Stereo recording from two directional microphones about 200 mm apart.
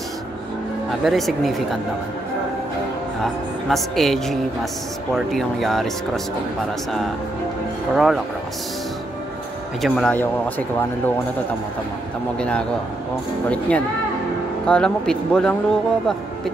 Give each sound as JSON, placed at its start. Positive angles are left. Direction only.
{"t": 1.0, "sound": "speech", "side_deg": 0}
{"t": 3.6, "sound": "speech", "side_deg": 0}
{"t": 7.9, "sound": "speech", "side_deg": 0}
{"t": 9.8, "sound": "speech", "side_deg": 0}
{"t": 12.4, "sound": "speech", "side_deg": 5}